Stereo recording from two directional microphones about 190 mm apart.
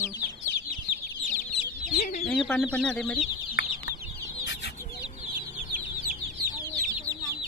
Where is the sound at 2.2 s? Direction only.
5° left (ahead or behind).